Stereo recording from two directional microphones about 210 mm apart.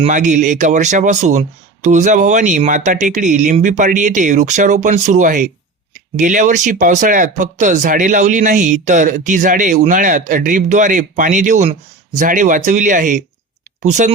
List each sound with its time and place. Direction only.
0.0 s speech: 35° right (ahead or behind)